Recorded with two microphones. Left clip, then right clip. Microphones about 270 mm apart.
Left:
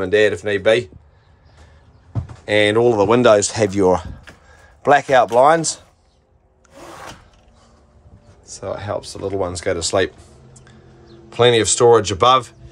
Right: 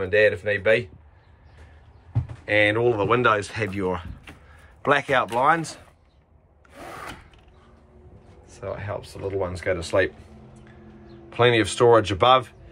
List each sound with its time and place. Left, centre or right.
0.1 s speech: left
2.4 s speech: centre
8.5 s speech: centre
11.2 s speech: centre